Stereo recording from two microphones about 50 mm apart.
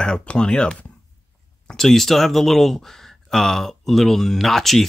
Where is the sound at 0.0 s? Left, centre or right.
Centre.